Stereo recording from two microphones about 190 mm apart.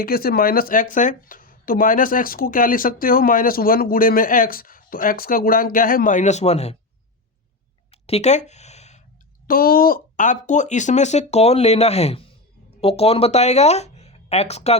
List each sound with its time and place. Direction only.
0.0 s speech: 50° left (ahead or behind); by 6.7 s 35° left (ahead or behind)
7.9 s a sound: 30° left (ahead or behind)
9.5 s speech: 50° left (ahead or behind); by 14.8 s 35° left (ahead or behind)